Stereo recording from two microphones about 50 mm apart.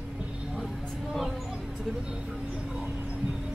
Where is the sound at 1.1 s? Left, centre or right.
Centre.